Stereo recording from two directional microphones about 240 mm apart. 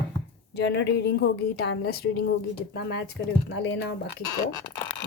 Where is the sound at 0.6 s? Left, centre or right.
Left.